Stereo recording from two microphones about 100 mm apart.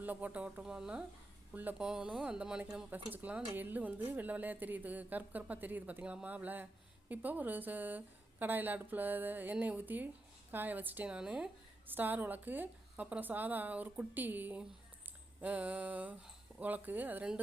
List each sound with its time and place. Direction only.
0.0 s speech: 15° right (ahead or behind)